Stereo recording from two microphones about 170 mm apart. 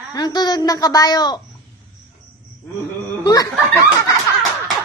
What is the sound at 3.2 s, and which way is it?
Speech, 20° left (ahead or behind).